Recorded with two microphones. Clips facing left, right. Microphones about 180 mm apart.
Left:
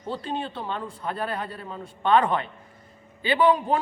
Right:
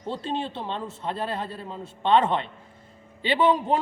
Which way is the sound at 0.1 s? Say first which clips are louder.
Right 1 dB; 25° right (ahead or behind).